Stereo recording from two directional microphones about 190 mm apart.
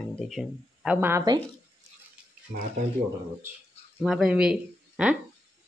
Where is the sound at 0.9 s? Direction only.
15° right (ahead or behind).